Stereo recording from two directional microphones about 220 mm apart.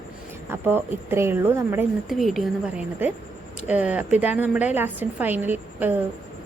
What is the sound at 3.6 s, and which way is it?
A woman's voice, 5° right (ahead or behind).